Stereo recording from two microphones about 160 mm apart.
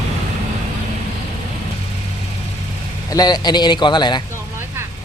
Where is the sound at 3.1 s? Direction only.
25° left (ahead or behind).